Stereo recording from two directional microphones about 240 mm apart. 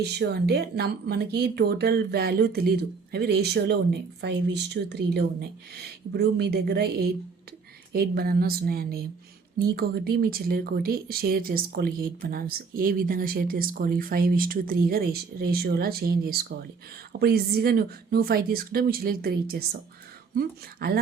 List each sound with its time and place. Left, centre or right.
0.0 s speech: right